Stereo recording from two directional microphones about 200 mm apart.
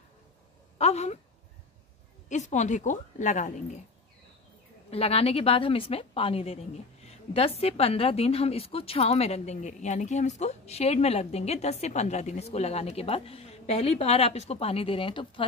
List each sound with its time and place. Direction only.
0.7 s a woman's voice: 35° left (ahead or behind)
2.2 s a woman's voice: 35° left (ahead or behind)
4.9 s a woman's voice: 30° left (ahead or behind)